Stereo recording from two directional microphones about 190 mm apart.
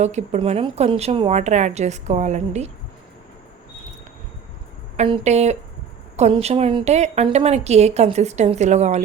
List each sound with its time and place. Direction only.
0.0 s a woman's voice: 35° right (ahead or behind)
4.9 s a woman's voice: 30° right (ahead or behind)